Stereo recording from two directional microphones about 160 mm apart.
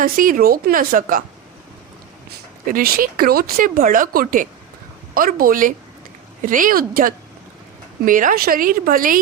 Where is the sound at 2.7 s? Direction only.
65° right (ahead or behind).